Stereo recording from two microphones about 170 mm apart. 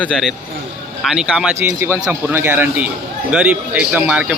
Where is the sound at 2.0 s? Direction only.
10° right (ahead or behind).